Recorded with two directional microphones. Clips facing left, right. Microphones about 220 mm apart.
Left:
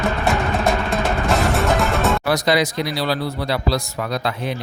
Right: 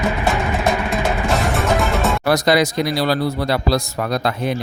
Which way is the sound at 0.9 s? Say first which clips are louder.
Even; centre (ahead or behind).